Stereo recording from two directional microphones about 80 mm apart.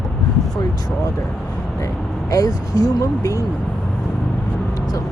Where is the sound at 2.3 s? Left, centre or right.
Left.